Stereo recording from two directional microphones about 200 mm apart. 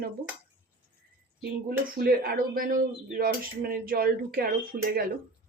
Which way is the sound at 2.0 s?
50° right (ahead or behind).